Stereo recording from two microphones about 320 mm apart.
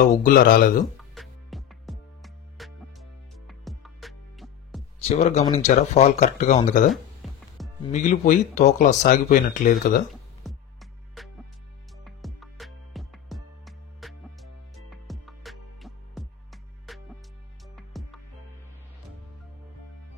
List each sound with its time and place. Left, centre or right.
0.2 s speech: left
0.9 s music: centre
5.0 s speech: centre
6.9 s music: centre
7.9 s speech: left
10.0 s music: centre